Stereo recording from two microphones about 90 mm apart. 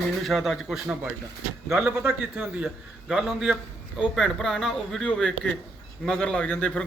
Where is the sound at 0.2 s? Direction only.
Centre (ahead or behind).